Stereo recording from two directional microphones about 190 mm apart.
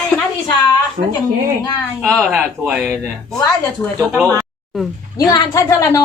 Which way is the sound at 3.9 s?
15° right (ahead or behind).